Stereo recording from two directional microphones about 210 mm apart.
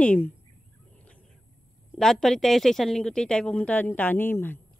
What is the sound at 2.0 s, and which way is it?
Speech, centre (ahead or behind).